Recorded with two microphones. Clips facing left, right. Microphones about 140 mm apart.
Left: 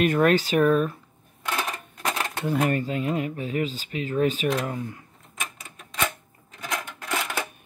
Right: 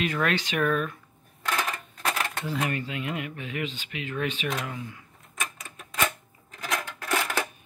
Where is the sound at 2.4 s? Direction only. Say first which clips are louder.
Left 9 dB; 50° left (ahead or behind).